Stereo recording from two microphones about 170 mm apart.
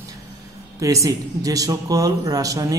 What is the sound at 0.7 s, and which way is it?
A man's voice, 20° right (ahead or behind).